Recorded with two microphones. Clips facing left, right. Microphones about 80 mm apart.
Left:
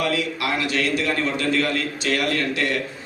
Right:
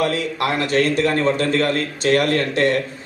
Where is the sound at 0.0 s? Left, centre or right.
Right.